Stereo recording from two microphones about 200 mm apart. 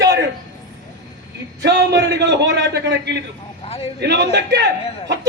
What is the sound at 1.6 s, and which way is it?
A man's voice, 60° right (ahead or behind).